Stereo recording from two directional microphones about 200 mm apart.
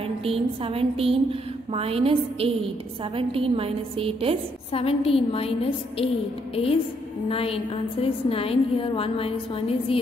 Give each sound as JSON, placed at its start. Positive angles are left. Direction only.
{"t": 0.2, "sound": "a woman's voice", "side_deg": -30}
{"t": 4.7, "sound": "a woman's voice", "side_deg": 30}
{"t": 7.2, "sound": "a woman's voice", "side_deg": 30}